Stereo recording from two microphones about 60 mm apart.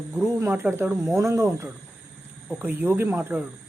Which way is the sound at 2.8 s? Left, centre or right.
Right.